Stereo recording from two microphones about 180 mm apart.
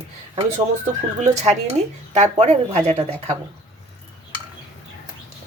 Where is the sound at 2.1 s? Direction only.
40° right (ahead or behind).